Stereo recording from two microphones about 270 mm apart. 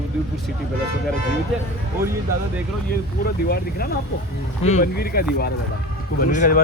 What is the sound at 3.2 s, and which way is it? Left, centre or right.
Speech, left.